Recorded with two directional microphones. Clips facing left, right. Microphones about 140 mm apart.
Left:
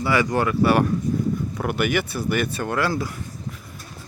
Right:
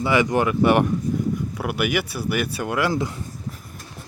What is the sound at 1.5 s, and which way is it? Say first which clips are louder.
Speech: left 2 dB; 5° right (ahead or behind).